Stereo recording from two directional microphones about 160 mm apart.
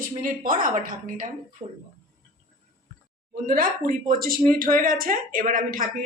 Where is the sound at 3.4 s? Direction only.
60° right (ahead or behind).